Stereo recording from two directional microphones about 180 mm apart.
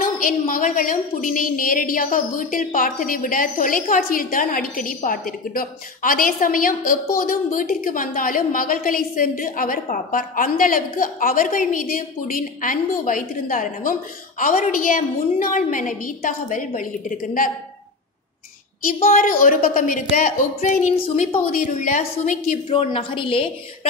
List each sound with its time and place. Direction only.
0.5 s a woman's voice: 50° left (ahead or behind)
19.0 s a woman's voice: 50° left (ahead or behind)
21.0 s a woman's voice: 35° left (ahead or behind)
22.7 s a woman's voice: 30° left (ahead or behind)